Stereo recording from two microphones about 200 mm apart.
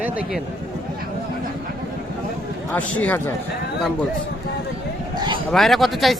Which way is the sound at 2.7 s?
10° left (ahead or behind).